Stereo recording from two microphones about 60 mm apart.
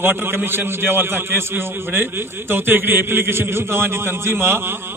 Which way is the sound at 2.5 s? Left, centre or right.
Right.